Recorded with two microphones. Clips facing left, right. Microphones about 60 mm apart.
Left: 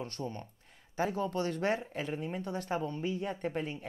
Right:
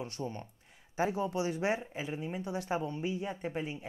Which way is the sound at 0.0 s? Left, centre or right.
Centre.